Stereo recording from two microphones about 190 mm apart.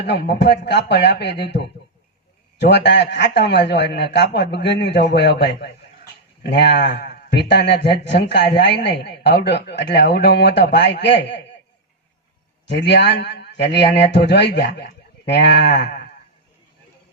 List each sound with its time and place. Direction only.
0.0 s a man's voice: 60° left (ahead or behind)
12.6 s a man's voice: 65° left (ahead or behind)